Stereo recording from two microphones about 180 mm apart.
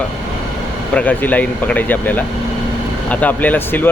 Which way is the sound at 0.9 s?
10° left (ahead or behind).